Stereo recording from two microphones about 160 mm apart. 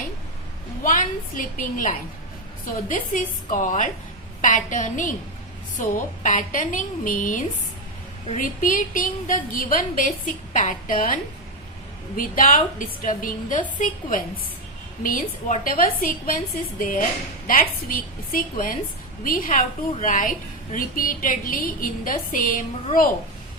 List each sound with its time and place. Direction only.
0.9 s a woman's voice: 55° left (ahead or behind)
2.9 s a woman's voice: 55° left (ahead or behind)
19.9 s a woman's voice: 50° left (ahead or behind)